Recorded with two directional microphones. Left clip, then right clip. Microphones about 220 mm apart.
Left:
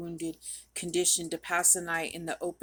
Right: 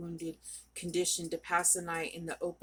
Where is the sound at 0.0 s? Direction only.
50° left (ahead or behind).